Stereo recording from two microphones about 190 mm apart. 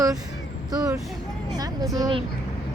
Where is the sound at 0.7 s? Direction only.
20° right (ahead or behind).